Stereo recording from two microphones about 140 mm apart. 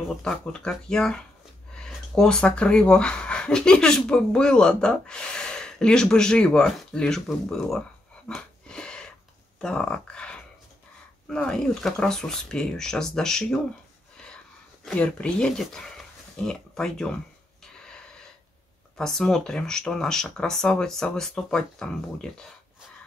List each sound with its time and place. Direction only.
0.2 s speech: 5° left (ahead or behind)
8.3 s a sound: 5° left (ahead or behind)
9.6 s speech: 5° left (ahead or behind)
14.9 s speech: 10° left (ahead or behind)
17.8 s a sound: 5° left (ahead or behind)
18.9 s speech: 5° left (ahead or behind)